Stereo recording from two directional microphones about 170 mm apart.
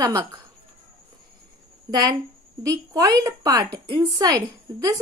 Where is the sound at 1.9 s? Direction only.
25° right (ahead or behind).